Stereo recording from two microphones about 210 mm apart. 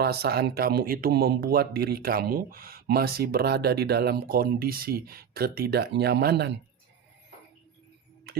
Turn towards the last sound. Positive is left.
turn(degrees=-50)  # may be behind; listen again after turning